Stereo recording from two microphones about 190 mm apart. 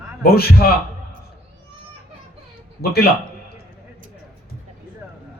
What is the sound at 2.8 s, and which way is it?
Speech, 55° left (ahead or behind).